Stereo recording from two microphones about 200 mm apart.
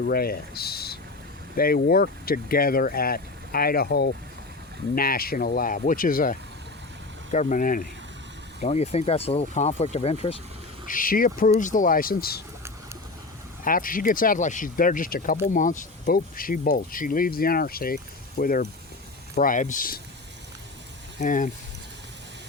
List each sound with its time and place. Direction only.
0.0 s speech: 50° left (ahead or behind); by 10.3 s 30° left (ahead or behind)
10.8 s speech: 45° left (ahead or behind)
13.7 s speech: 45° left (ahead or behind)
21.2 s speech: 40° left (ahead or behind)